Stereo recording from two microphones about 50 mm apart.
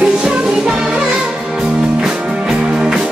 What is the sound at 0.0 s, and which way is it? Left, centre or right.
Music, right.